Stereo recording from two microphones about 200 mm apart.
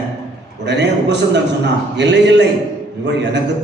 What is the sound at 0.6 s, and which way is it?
A man's voice, 60° right (ahead or behind).